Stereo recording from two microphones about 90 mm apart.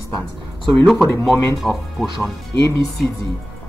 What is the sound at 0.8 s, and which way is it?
Speech, centre (ahead or behind).